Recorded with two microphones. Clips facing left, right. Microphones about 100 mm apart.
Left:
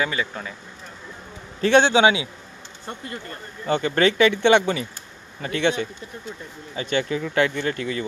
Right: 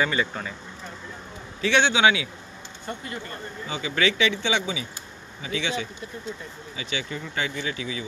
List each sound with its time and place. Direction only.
0.0 s speech: centre (ahead or behind)
1.6 s a man's voice: 40° left (ahead or behind)
3.6 s speech: 55° left (ahead or behind)
7.1 s speech: 70° left (ahead or behind); by 8.0 s 55° left (ahead or behind)